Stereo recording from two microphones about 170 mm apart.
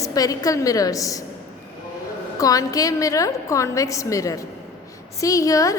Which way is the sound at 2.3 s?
20° left (ahead or behind).